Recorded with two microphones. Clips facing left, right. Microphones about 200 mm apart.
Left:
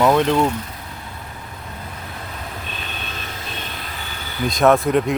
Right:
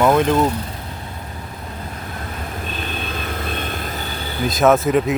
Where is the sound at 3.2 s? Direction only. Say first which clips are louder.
Right 7 dB; 55° right (ahead or behind); by 4.2 s 40° right (ahead or behind).